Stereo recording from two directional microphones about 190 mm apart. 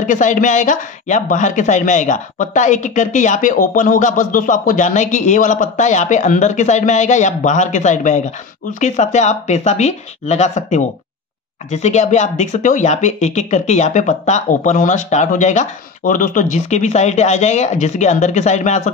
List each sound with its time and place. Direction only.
0.0 s speech: 40° left (ahead or behind)